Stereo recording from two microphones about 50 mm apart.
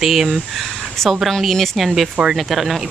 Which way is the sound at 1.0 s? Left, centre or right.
Centre.